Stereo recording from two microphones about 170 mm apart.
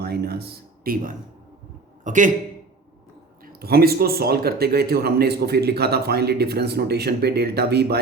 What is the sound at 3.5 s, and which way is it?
Speech, 65° right (ahead or behind).